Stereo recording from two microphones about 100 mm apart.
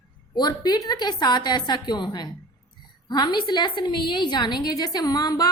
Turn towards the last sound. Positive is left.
turn(degrees=40)  # may be behind; listen again after turning